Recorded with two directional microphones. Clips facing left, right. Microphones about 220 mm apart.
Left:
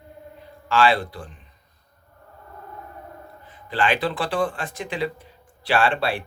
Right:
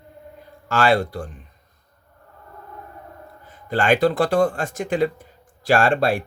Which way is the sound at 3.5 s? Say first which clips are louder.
Right 4 dB; 45° right (ahead or behind).